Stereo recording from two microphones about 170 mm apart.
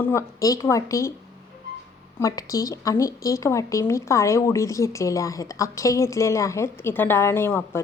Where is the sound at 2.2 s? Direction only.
20° left (ahead or behind).